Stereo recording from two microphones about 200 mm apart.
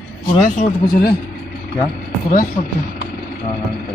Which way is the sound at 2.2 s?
40° left (ahead or behind).